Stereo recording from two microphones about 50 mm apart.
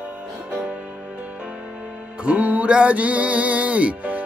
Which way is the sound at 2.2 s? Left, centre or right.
Right.